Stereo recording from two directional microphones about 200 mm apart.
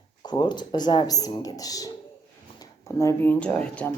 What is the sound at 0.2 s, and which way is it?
Speech, 20° left (ahead or behind).